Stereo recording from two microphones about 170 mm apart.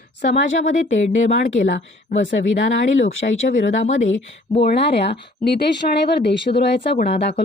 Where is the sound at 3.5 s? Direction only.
45° left (ahead or behind).